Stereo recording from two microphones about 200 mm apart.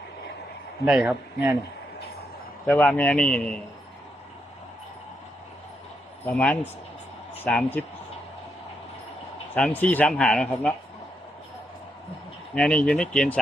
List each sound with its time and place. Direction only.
0.9 s a man's voice: 5° right (ahead or behind)
2.6 s a man's voice: 10° left (ahead or behind)
6.2 s a man's voice: 5° left (ahead or behind)
9.6 s speech: 5° left (ahead or behind)
12.5 s speech: 5° left (ahead or behind)